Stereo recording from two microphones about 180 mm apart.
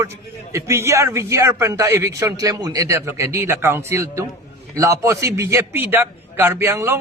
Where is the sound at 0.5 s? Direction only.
15° right (ahead or behind).